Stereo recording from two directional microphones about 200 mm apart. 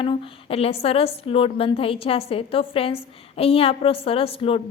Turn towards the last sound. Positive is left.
turn(degrees=30)  # may be behind; listen again after turning